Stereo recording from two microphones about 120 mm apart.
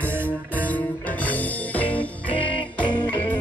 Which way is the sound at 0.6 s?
15° left (ahead or behind).